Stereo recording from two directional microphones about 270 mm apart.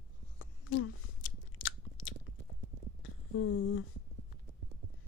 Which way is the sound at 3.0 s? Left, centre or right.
Left.